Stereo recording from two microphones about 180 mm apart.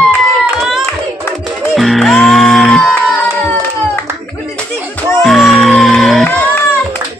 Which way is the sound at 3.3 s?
10° left (ahead or behind).